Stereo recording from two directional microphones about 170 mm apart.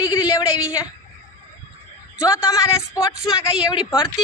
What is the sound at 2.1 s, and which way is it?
A woman's voice, 20° left (ahead or behind).